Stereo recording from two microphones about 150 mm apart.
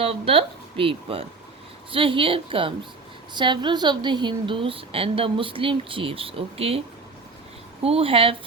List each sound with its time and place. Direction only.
0.0 s a woman's voice: 40° right (ahead or behind)